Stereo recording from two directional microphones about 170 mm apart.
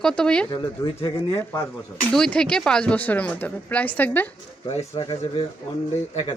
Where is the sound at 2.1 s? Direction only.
5° left (ahead or behind).